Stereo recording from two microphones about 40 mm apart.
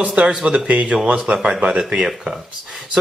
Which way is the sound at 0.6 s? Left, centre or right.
Right.